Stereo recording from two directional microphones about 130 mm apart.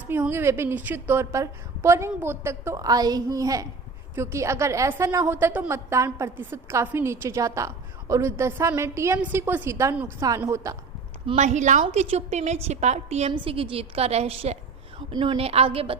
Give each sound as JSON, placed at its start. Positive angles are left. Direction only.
{"t": 0.1, "sound": "a woman's voice", "side_deg": -15}
{"t": 11.3, "sound": "a woman's voice", "side_deg": -65}
{"t": 11.9, "sound": "a woman's voice", "side_deg": -55}
{"t": 13.3, "sound": "a woman's voice", "side_deg": -45}
{"t": 15.1, "sound": "a woman's voice", "side_deg": -35}